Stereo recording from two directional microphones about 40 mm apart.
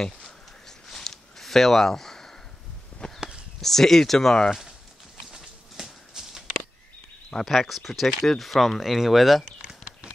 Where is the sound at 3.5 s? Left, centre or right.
Centre.